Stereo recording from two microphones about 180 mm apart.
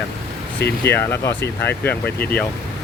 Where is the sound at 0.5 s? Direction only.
65° left (ahead or behind).